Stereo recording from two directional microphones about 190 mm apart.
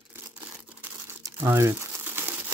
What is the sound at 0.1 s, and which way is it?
Tearing, 5° right (ahead or behind).